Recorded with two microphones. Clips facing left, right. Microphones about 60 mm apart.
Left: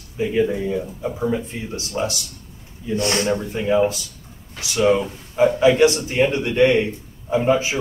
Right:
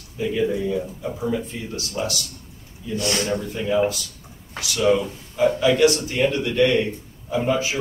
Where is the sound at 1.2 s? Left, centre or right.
Left.